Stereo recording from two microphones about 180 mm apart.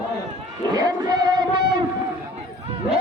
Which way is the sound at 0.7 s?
20° right (ahead or behind).